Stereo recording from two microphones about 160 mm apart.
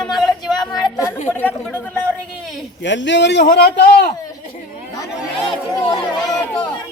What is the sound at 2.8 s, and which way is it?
A man's voice, 90° left.